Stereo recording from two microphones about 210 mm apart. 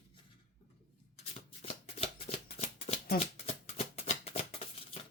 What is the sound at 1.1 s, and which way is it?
Shuffling cards, 30° left (ahead or behind).